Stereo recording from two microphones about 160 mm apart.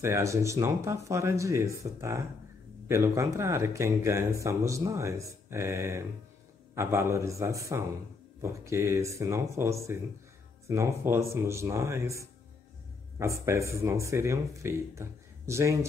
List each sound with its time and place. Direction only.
0.0 s speech: 20° right (ahead or behind)